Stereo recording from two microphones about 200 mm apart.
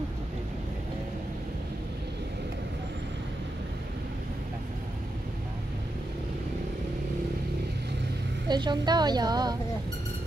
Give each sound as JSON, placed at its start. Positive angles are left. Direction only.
{"t": 8.5, "sound": "a woman's voice", "side_deg": -20}